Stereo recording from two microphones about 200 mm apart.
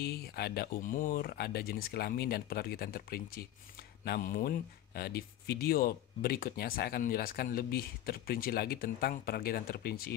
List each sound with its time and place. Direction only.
0.0 s speech: 50° left (ahead or behind)